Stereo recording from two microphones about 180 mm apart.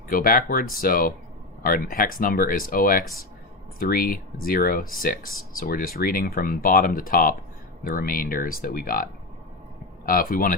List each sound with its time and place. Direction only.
0.1 s speech: 55° left (ahead or behind)
10.1 s speech: 50° left (ahead or behind)